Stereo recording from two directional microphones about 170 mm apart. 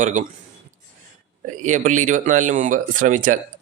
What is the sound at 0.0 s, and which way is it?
Speech, 45° right (ahead or behind).